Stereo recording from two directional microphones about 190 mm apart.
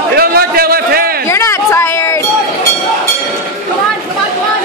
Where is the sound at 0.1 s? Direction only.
55° right (ahead or behind).